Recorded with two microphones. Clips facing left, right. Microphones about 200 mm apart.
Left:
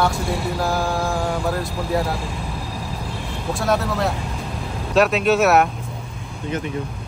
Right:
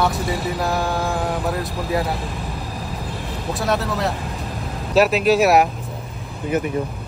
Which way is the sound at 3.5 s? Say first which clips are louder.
Left 1 dB; centre (ahead or behind).